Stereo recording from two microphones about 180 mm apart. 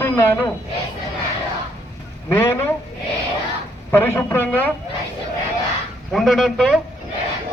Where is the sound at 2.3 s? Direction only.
15° left (ahead or behind).